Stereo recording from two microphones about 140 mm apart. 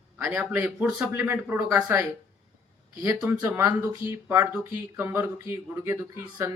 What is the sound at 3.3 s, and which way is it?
Speech, 20° right (ahead or behind).